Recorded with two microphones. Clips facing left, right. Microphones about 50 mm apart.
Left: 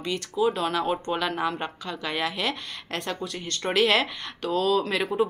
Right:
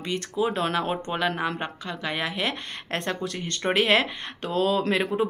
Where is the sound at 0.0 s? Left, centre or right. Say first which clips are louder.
Left 1 dB; right.